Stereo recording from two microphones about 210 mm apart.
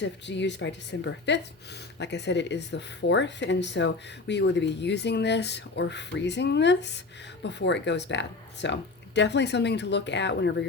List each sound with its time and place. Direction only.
0.0 s speech: 55° left (ahead or behind)